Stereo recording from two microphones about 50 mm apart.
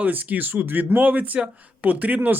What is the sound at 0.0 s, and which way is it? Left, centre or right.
Speech, right.